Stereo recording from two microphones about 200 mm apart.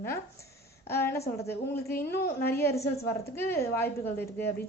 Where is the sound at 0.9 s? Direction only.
10° left (ahead or behind).